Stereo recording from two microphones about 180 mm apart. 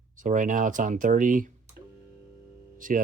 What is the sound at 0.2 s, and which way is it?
Speech, 45° right (ahead or behind).